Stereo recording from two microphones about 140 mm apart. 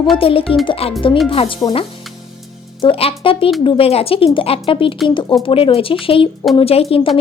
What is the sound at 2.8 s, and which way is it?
Speech, 45° left (ahead or behind).